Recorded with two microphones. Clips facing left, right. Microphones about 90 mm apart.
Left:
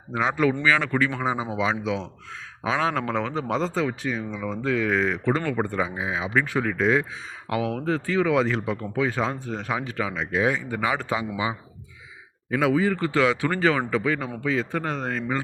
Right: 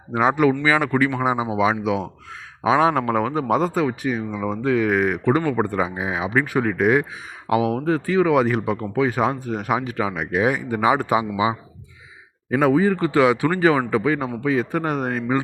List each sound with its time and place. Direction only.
0.6 s a man's voice: 15° right (ahead or behind)
12.5 s a man's voice: 50° right (ahead or behind)
12.7 s a man's voice: 30° right (ahead or behind)
13.0 s a man's voice: 15° right (ahead or behind)